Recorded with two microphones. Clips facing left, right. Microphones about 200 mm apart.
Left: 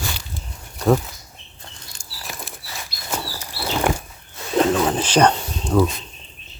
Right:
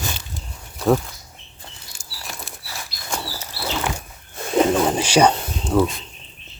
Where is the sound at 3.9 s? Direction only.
50° left (ahead or behind).